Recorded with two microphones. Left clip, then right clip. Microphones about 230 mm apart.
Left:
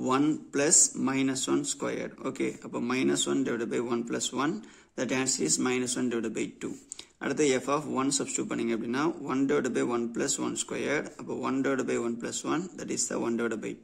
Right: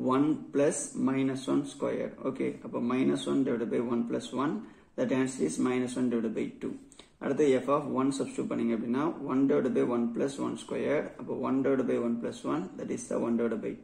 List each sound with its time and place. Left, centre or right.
0.0 s speech: left